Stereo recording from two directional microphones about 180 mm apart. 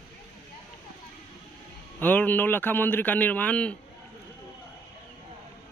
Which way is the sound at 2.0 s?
10° left (ahead or behind).